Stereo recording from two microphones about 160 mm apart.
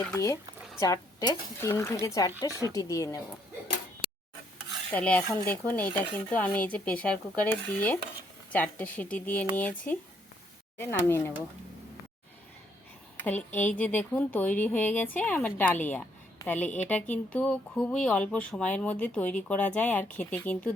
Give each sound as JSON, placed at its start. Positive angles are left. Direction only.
{"t": 0.0, "sound": "speech", "side_deg": 15}
{"t": 4.9, "sound": "speech", "side_deg": 10}
{"t": 10.8, "sound": "speech", "side_deg": 15}
{"t": 13.1, "sound": "speech", "side_deg": 10}